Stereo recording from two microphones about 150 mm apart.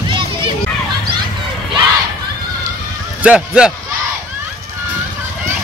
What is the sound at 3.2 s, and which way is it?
Speech, 5° right (ahead or behind).